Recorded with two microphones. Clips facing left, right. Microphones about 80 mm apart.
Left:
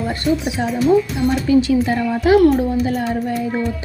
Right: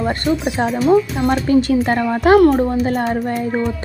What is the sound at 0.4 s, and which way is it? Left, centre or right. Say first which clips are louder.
Speech: right 1 dB; right.